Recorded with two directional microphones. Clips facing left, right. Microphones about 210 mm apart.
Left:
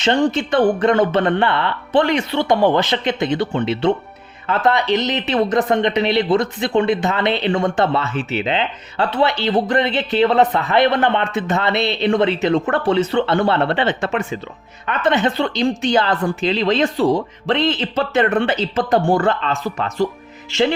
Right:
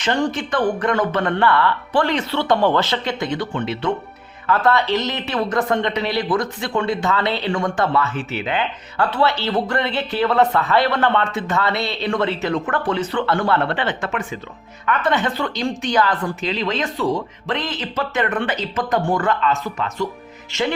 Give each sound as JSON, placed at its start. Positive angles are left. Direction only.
{"t": 0.0, "sound": "a woman's voice", "side_deg": 25}